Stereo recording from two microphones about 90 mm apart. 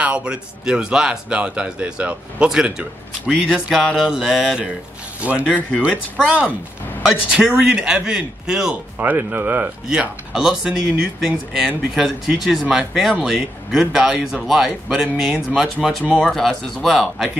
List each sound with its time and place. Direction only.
0.0 s speech: 10° right (ahead or behind)
5.4 s speech: 15° left (ahead or behind)
7.1 s speech: 5° right (ahead or behind)
8.9 s speech: 20° right (ahead or behind)
9.8 s speech: 5° right (ahead or behind)